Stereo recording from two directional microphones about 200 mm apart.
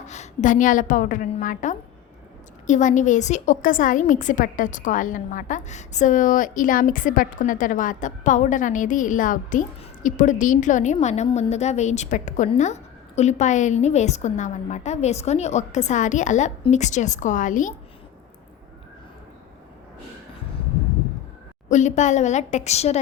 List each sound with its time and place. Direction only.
0.0 s a woman's voice: 35° left (ahead or behind)
21.7 s a woman's voice: 35° left (ahead or behind)